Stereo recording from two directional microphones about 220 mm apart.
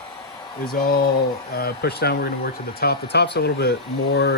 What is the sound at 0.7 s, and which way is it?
Speech, 45° left (ahead or behind).